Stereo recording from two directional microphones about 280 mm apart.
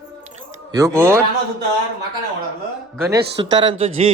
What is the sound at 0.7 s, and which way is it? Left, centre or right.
Speech, centre.